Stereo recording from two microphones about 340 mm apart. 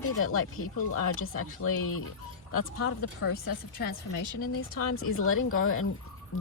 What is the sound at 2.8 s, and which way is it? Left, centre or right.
Speech, left.